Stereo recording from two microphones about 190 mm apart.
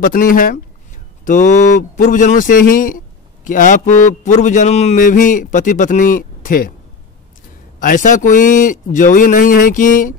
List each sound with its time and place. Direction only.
0.0 s speech: 45° left (ahead or behind)
7.8 s speech: 45° left (ahead or behind)